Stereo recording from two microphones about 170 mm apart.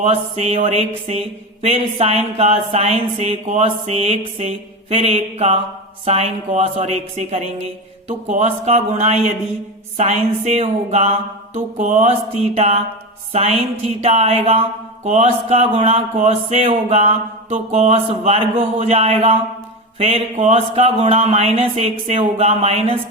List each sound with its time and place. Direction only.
0.0 s speech: 40° right (ahead or behind)